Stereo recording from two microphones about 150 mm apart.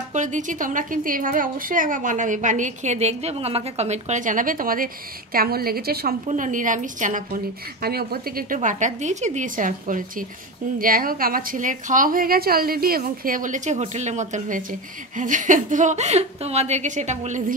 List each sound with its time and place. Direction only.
0.1 s a woman's voice: 55° right (ahead or behind)
5.3 s a woman's voice: 85° right
6.2 s a woman's voice: 60° right (ahead or behind)
7.8 s a woman's voice: 90° right
8.5 s a woman's voice: 55° right (ahead or behind)